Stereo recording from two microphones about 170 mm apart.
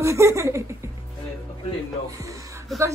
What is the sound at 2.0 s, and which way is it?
Speech, 20° right (ahead or behind).